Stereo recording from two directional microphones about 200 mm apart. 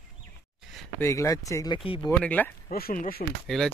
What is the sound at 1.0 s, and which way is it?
Speech, 15° left (ahead or behind).